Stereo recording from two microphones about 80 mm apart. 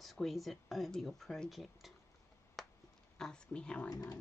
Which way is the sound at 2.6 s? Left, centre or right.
Centre.